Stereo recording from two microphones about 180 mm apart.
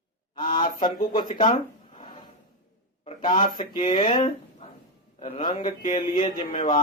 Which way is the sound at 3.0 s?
25° left (ahead or behind).